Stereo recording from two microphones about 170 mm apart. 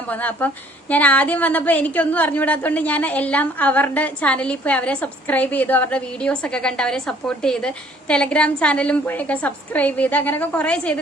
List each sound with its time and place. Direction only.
0.1 s a woman's voice: 10° left (ahead or behind)